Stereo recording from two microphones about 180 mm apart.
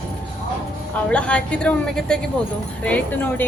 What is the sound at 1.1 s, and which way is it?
A woman's voice, 5° left (ahead or behind).